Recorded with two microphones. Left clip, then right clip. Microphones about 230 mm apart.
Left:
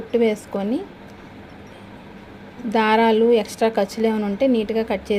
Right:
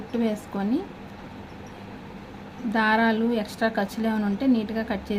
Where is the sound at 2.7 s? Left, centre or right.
Centre.